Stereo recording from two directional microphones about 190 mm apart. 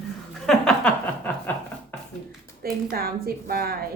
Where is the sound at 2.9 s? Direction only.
50° right (ahead or behind).